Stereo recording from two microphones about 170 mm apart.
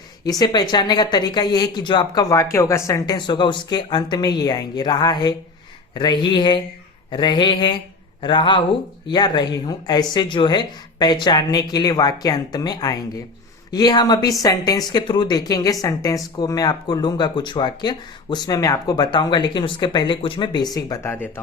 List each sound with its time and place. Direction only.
0.3 s a woman's voice: 25° left (ahead or behind)